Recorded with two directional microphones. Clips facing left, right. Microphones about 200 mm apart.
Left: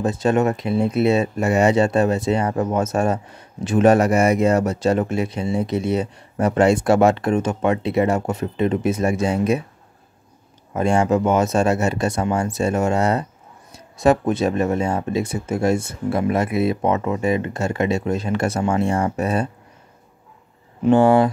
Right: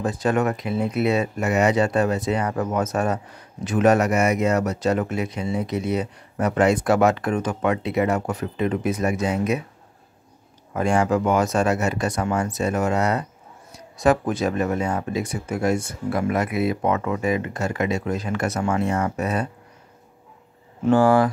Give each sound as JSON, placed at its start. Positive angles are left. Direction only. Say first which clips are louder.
{"t": 0.0, "sound": "speech", "louder": "left 3 dB", "side_deg": 25}
{"t": 10.7, "sound": "speech", "louder": "left 2 dB", "side_deg": 25}
{"t": 20.8, "sound": "speech", "louder": "left 3 dB", "side_deg": 20}